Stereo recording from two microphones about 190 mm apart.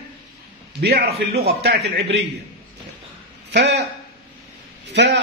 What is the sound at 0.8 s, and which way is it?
Speech, 60° right (ahead or behind).